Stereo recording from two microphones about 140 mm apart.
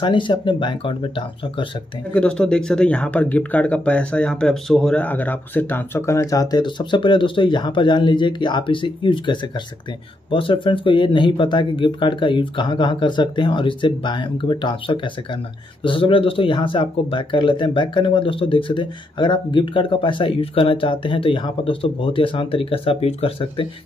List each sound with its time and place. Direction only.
0.0 s speech: 35° left (ahead or behind)
2.1 s speech: 5° left (ahead or behind); by 23.7 s 40° left (ahead or behind)